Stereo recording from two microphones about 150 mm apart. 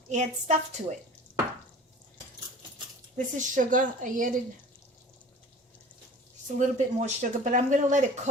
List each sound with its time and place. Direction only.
0.1 s a woman's voice: 50° right (ahead or behind)
3.2 s speech: 60° right (ahead or behind)
6.6 s speech: 50° right (ahead or behind)